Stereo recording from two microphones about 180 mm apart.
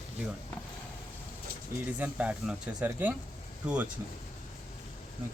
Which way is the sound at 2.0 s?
10° right (ahead or behind).